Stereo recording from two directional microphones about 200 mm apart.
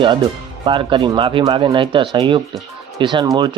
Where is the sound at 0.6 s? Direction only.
25° right (ahead or behind).